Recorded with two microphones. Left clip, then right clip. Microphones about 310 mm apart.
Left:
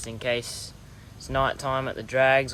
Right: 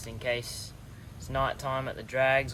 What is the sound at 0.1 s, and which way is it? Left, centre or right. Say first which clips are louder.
Speech: left 4 dB; left.